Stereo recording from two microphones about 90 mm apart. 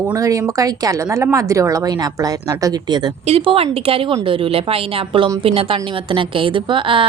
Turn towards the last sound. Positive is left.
turn(degrees=-70)  # may be behind; listen again after turning